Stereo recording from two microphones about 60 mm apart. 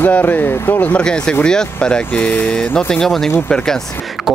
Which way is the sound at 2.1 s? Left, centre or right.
Left.